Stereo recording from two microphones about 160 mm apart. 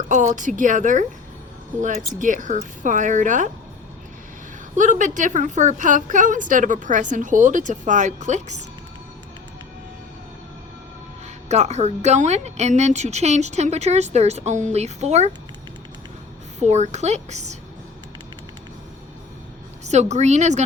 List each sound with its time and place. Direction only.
0.1 s a woman's voice: 50° right (ahead or behind)
4.8 s a woman's voice: 50° right (ahead or behind)
11.4 s a woman's voice: 45° right (ahead or behind)
16.6 s a woman's voice: 45° right (ahead or behind)
19.8 s a woman's voice: 45° right (ahead or behind)